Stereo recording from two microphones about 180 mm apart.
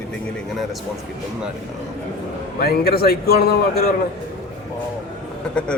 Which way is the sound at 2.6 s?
60° left (ahead or behind).